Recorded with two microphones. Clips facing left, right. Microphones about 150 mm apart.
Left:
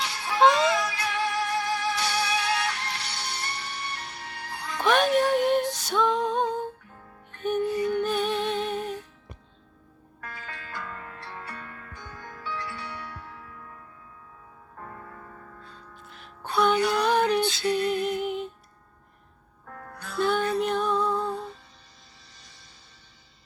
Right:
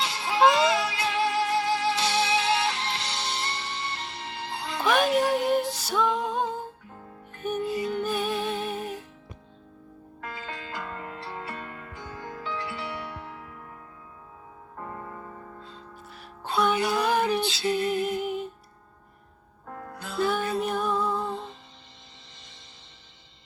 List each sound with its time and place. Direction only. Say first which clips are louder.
0.0 s music: even; 20° right (ahead or behind)
4.8 s music: left 1 dB; centre (ahead or behind)
10.2 s music: right 4 dB; 25° right (ahead or behind)
14.8 s music: right 4 dB; 30° right (ahead or behind)
16.0 s music: right 2 dB; 5° right (ahead or behind)
19.6 s music: right 3 dB; 25° right (ahead or behind)
20.1 s music: left 2 dB; 5° right (ahead or behind)
21.2 s music: left 2 dB; 25° right (ahead or behind)